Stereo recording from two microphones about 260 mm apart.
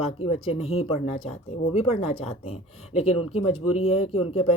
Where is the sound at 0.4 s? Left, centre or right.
Left.